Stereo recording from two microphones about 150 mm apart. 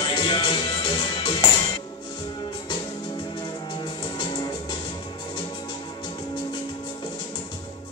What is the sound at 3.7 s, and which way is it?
Music, 30° left (ahead or behind).